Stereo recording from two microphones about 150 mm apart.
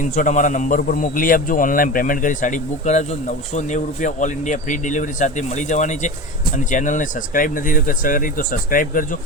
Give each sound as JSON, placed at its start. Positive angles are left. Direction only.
{"t": 0.0, "sound": "a man's voice", "side_deg": 60}